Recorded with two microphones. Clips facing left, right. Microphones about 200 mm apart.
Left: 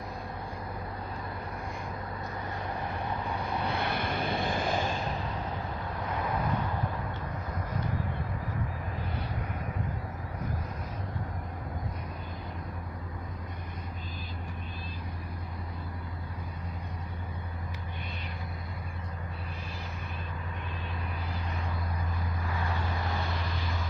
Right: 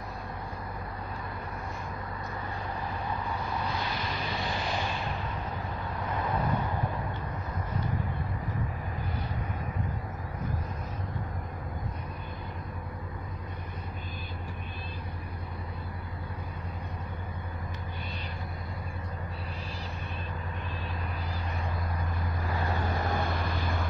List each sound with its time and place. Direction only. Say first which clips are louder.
3.6 s vehicle: left 2 dB; 60° left (ahead or behind)
22.5 s vehicle: right 4 dB; 40° right (ahead or behind); by 23.9 s 55° right (ahead or behind)